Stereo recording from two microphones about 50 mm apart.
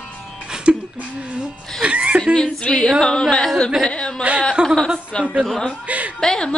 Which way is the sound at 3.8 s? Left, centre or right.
Centre.